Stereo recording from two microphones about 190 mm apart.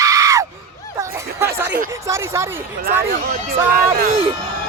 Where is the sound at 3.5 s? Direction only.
50° right (ahead or behind).